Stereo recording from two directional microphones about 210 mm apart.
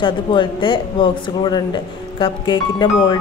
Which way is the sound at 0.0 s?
25° left (ahead or behind).